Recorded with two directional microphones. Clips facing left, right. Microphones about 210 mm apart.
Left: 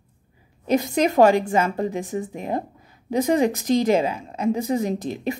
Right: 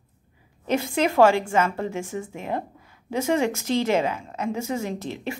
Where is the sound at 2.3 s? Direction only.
35° left (ahead or behind).